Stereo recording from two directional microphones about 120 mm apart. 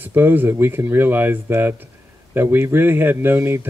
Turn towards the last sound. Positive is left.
turn(degrees=-20)  # may be behind; listen again after turning